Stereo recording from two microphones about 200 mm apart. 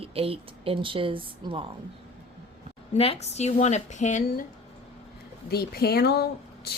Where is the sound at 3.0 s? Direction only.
30° left (ahead or behind).